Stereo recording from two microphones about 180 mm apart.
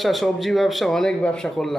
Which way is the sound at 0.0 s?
Centre (ahead or behind).